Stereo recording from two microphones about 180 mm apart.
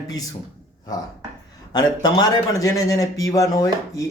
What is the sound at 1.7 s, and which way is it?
A man's voice, 25° left (ahead or behind).